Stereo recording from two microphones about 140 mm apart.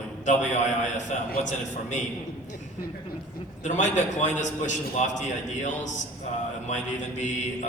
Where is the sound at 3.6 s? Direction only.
60° left (ahead or behind).